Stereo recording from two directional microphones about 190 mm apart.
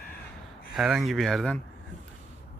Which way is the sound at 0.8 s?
Centre (ahead or behind).